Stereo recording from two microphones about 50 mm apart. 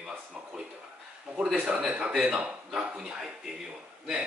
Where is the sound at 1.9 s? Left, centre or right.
Right.